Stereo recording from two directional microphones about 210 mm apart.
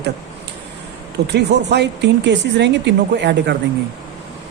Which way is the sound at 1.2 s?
55° right (ahead or behind).